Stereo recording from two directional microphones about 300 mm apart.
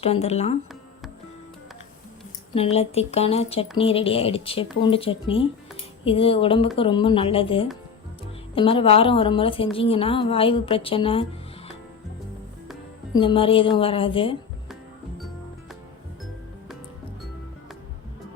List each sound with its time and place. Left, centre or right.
0.0 s speech: left
2.6 s a woman's voice: left
13.1 s a woman's voice: centre